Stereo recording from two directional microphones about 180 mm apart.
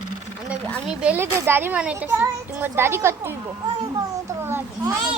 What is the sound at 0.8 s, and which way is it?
A child's voice, 5° right (ahead or behind).